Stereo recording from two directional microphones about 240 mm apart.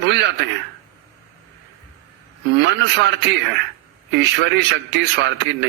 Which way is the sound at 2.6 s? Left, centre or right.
Right.